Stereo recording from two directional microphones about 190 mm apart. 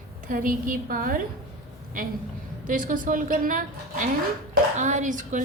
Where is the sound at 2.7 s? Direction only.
45° right (ahead or behind).